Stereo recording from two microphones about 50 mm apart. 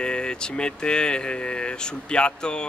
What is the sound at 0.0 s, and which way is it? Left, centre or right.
Speech, centre.